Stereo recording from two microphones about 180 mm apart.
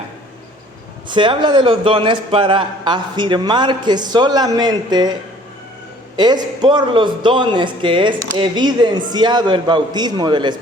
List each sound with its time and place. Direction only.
1.0 s a man's voice: 25° right (ahead or behind)
6.1 s a man's voice: 25° right (ahead or behind)